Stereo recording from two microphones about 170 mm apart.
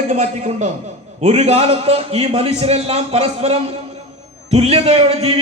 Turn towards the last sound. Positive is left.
turn(degrees=-35)  # may be behind; listen again after turning